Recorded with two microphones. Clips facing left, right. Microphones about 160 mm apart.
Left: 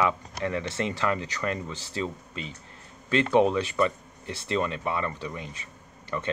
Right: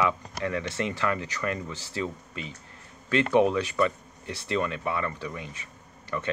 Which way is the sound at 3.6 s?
25° left (ahead or behind).